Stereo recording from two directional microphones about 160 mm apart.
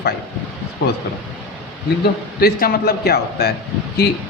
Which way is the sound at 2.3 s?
75° left (ahead or behind).